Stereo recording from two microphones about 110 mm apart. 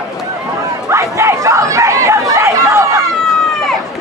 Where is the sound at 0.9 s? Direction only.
25° right (ahead or behind).